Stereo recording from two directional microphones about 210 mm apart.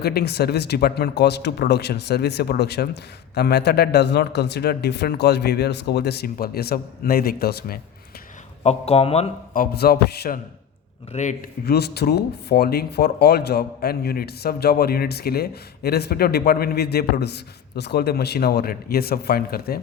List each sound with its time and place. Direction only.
0.0 s speech: 50° left (ahead or behind)
8.6 s speech: 30° left (ahead or behind)
9.5 s speech: 45° left (ahead or behind)
11.1 s speech: 35° left (ahead or behind)
11.6 s speech: 50° left (ahead or behind)